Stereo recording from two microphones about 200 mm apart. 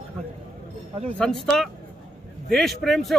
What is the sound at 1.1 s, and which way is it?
A man's voice, 5° left (ahead or behind).